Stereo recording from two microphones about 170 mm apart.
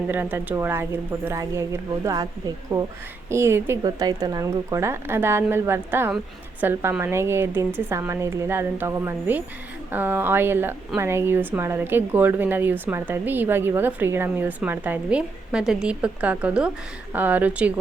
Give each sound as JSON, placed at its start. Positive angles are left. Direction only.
{"t": 0.1, "sound": "speech", "side_deg": -10}